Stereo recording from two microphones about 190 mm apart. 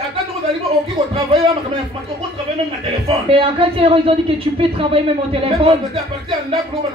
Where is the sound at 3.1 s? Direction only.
30° right (ahead or behind).